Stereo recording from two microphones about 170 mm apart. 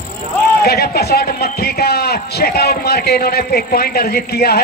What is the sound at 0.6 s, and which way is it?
A man's voice, 70° left (ahead or behind).